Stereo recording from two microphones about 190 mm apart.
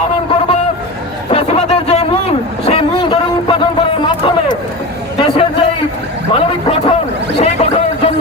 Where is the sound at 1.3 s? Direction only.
30° left (ahead or behind).